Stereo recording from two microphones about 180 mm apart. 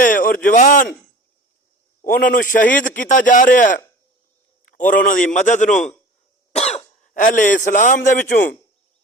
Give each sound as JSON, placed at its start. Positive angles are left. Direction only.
{"t": 0.0, "sound": "a man's voice", "side_deg": 50}
{"t": 2.0, "sound": "a man's voice", "side_deg": 50}
{"t": 5.0, "sound": "a man's voice", "side_deg": 45}